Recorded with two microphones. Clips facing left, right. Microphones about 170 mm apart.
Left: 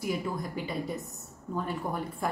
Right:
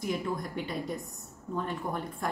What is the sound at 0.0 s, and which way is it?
A woman's voice, 5° left (ahead or behind).